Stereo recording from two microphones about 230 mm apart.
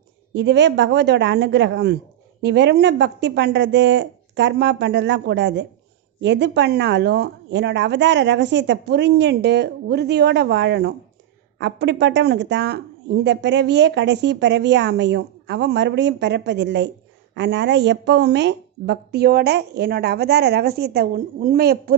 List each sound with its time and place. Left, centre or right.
0.3 s speech: right